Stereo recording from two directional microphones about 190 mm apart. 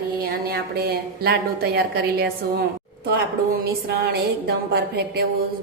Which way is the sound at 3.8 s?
55° right (ahead or behind).